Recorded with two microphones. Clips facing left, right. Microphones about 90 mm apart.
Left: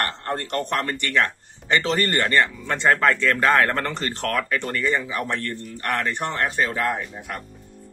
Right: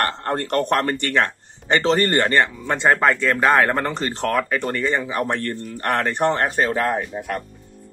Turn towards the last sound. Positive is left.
turn(degrees=-55)  # may be behind; listen again after turning